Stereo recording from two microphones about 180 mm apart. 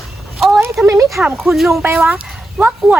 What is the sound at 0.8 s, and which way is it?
Speech, 15° right (ahead or behind).